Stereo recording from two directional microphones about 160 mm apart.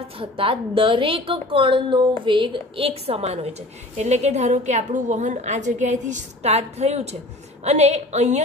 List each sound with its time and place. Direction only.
0.2 s a woman's voice: 35° right (ahead or behind)